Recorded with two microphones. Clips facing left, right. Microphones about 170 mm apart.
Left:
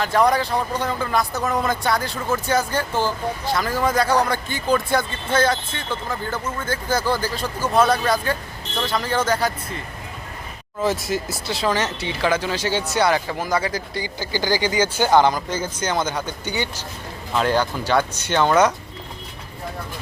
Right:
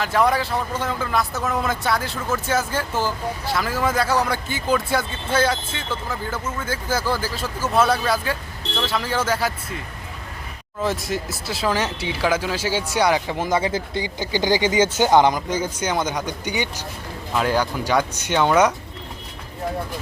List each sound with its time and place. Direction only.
0.0 s speech: 5° right (ahead or behind)
10.8 s speech: centre (ahead or behind)